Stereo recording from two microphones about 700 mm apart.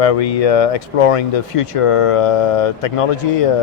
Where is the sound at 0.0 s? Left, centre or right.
Left.